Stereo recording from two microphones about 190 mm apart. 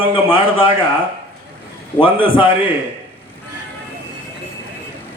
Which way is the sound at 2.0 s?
30° left (ahead or behind).